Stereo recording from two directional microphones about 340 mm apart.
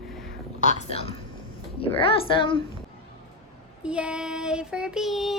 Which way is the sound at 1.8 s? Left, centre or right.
Centre.